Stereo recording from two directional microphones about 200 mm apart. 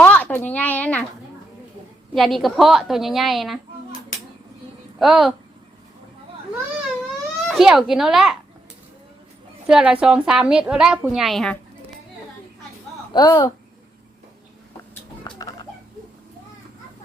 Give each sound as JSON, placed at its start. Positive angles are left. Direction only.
{"t": 0.0, "sound": "a sound", "side_deg": 5}
{"t": 2.1, "sound": "a woman's voice", "side_deg": 0}
{"t": 4.9, "sound": "a woman's voice", "side_deg": 0}
{"t": 7.4, "sound": "a woman's voice", "side_deg": 0}
{"t": 9.6, "sound": "a woman's voice", "side_deg": -5}
{"t": 13.1, "sound": "speech", "side_deg": 20}
{"t": 15.2, "sound": "a sound", "side_deg": 15}